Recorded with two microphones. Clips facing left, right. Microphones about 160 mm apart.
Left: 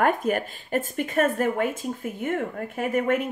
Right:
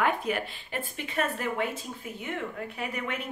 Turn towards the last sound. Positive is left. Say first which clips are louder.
# left 10 dB
turn(degrees=45)  # may be behind; listen again after turning